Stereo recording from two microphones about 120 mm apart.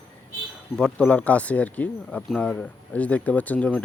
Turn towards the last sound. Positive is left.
turn(degrees=10)  # may be behind; listen again after turning